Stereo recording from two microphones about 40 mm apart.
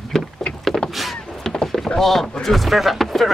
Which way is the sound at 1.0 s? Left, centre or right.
Centre.